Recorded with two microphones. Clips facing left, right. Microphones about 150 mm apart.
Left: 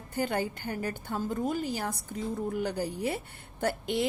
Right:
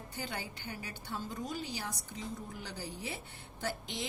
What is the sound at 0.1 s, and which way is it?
A woman's voice, 50° left (ahead or behind).